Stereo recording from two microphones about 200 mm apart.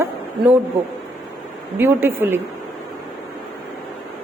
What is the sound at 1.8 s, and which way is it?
Speech, 10° right (ahead or behind).